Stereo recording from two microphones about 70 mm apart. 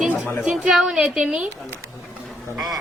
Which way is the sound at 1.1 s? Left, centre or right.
Centre.